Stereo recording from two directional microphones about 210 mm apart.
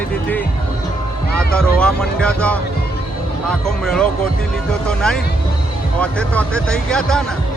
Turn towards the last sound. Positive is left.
turn(degrees=5)  # may be behind; listen again after turning